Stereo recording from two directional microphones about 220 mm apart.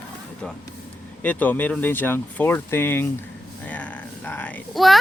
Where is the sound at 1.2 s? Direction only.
5° left (ahead or behind).